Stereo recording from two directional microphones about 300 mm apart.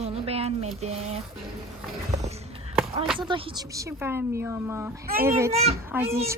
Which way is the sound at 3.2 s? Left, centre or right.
Centre.